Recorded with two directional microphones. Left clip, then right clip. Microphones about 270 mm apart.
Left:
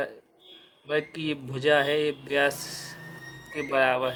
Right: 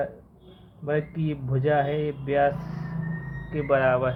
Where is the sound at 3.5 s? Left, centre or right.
Left.